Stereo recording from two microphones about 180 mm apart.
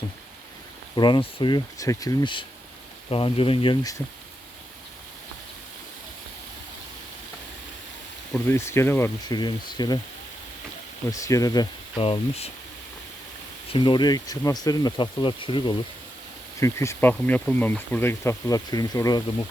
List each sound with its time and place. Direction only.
0.9 s speech: 25° left (ahead or behind)
8.3 s speech: 15° left (ahead or behind)
9.3 s speech: 25° left (ahead or behind)
11.1 s speech: 20° left (ahead or behind); by 12.5 s 35° left (ahead or behind)
13.7 s speech: 25° left (ahead or behind)
16.6 s speech: 15° left (ahead or behind)